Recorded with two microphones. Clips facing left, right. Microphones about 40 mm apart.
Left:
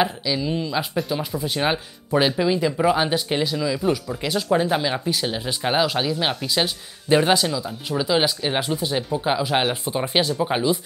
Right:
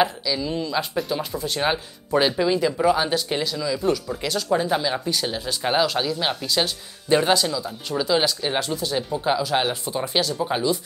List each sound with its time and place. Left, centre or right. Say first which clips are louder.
0.2 s speech: left 1 dB; centre